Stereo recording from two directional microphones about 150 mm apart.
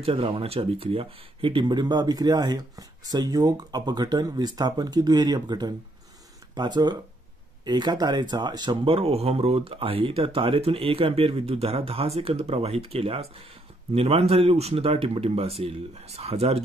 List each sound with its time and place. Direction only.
0.0 s speech: 35° right (ahead or behind)